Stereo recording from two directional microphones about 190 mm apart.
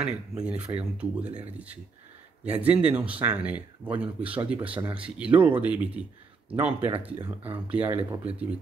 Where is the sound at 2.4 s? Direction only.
5° right (ahead or behind).